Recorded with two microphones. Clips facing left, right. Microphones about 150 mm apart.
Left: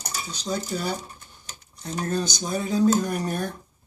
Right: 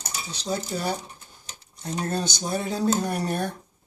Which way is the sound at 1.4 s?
30° right (ahead or behind).